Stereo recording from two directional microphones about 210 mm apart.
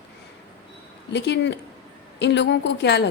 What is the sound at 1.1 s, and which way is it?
A woman's voice, 55° left (ahead or behind).